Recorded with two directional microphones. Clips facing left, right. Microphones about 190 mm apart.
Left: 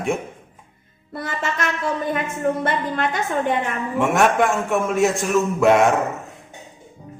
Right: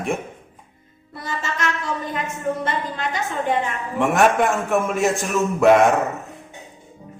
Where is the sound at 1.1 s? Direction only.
60° left (ahead or behind).